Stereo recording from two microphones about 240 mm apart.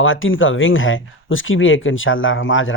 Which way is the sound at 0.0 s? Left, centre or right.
Left.